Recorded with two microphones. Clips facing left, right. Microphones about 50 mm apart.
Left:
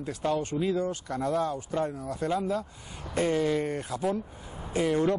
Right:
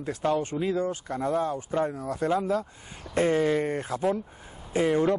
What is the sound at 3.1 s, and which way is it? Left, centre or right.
Speech, right.